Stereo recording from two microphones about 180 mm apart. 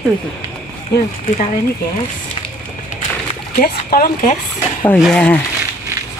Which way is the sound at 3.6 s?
55° left (ahead or behind).